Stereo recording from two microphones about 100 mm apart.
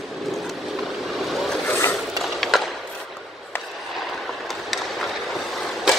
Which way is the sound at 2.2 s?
Centre (ahead or behind).